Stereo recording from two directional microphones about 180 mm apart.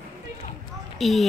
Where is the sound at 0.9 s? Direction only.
Centre (ahead or behind).